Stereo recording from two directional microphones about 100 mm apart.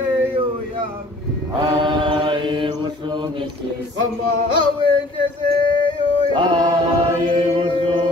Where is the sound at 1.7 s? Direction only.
50° right (ahead or behind).